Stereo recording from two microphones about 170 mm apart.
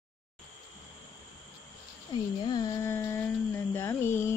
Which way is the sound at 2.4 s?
25° left (ahead or behind).